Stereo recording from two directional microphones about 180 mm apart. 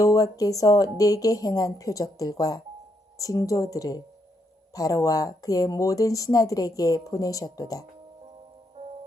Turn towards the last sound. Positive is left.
turn(degrees=20)  # may be behind; listen again after turning